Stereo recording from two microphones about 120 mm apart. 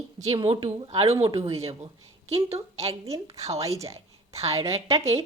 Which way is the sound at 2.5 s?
55° right (ahead or behind).